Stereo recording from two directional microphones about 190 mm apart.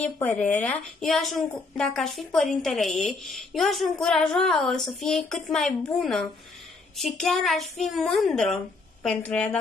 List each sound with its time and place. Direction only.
0.0 s a woman's voice: 5° left (ahead or behind)